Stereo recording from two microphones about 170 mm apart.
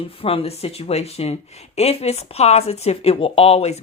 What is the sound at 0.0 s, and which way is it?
Speech, 35° left (ahead or behind).